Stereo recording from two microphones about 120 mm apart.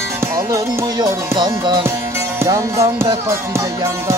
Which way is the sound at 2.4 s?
25° right (ahead or behind).